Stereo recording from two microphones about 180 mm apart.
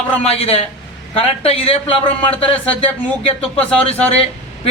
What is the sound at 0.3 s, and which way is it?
A man's voice, 35° left (ahead or behind).